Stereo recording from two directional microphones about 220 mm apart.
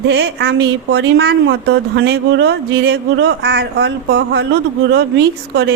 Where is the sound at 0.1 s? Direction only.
50° right (ahead or behind).